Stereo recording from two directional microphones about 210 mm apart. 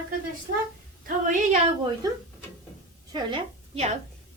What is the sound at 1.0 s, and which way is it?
Speech, 40° right (ahead or behind).